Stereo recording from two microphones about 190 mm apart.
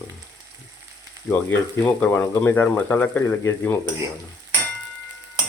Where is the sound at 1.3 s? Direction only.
10° left (ahead or behind).